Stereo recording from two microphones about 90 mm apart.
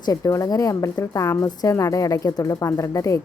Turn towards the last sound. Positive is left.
turn(degrees=35)  # may be behind; listen again after turning